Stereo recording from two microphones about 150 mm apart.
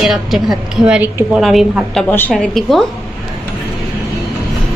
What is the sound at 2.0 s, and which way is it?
Speech, 15° left (ahead or behind).